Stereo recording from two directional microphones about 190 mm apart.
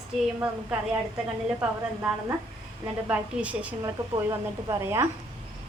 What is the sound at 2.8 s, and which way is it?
Speech, 5° right (ahead or behind).